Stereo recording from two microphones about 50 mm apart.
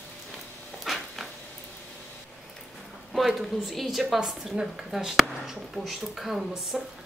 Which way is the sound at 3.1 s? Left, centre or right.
Centre.